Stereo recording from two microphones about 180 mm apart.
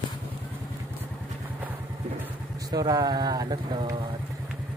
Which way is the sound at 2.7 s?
20° right (ahead or behind).